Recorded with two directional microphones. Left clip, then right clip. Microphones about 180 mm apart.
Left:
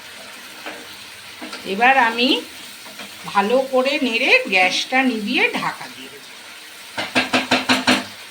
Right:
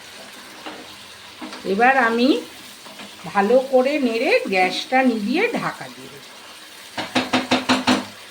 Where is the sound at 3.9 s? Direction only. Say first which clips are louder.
Left 3 dB; 55° right (ahead or behind).